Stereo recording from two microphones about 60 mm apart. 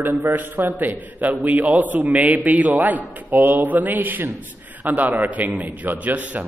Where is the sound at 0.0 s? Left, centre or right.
Right.